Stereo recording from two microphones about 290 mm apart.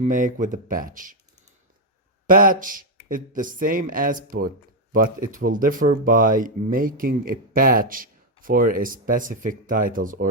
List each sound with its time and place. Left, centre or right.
0.0 s speech: right
2.2 s speech: right